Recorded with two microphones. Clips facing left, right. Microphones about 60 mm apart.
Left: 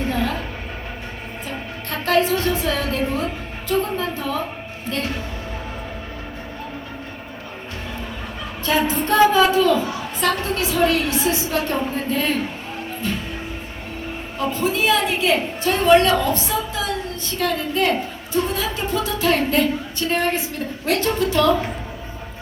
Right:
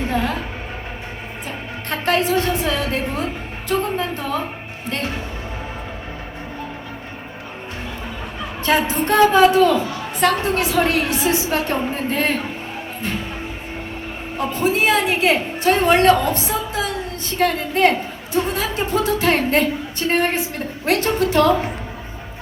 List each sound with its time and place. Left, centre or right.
0.1 s speech: right
1.9 s a woman's voice: right
8.6 s a woman's voice: right
13.0 s a woman's voice: right
14.3 s a woman's voice: right